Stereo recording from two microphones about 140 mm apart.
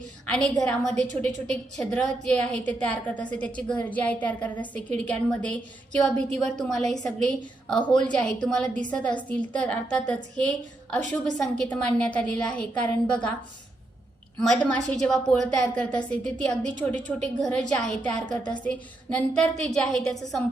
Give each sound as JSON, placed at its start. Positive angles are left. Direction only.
{"t": 0.3, "sound": "a woman's voice", "side_deg": 5}
{"t": 10.9, "sound": "a woman's voice", "side_deg": 5}
{"t": 14.3, "sound": "a woman's voice", "side_deg": 5}